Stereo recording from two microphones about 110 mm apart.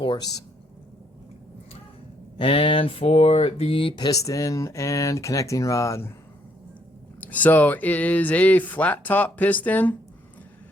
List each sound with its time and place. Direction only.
0.0 s speech: 45° left (ahead or behind)
2.4 s speech: 55° left (ahead or behind); by 6.1 s 25° left (ahead or behind)
7.2 s speech: 15° left (ahead or behind)